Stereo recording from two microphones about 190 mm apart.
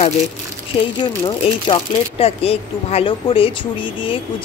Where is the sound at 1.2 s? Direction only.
30° left (ahead or behind).